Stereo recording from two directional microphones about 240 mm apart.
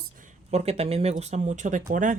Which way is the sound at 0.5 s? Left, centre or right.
Right.